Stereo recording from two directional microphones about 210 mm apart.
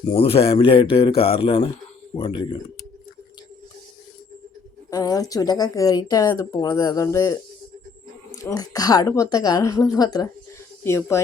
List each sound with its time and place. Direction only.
0.1 s speech: 25° left (ahead or behind)
4.9 s speech: 15° left (ahead or behind)
8.4 s speech: 15° left (ahead or behind)